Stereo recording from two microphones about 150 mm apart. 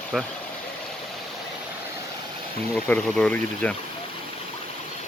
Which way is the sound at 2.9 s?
10° left (ahead or behind).